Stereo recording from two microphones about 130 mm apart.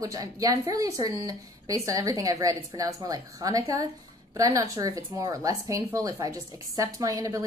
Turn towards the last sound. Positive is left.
turn(degrees=-25)  # may be behind; listen again after turning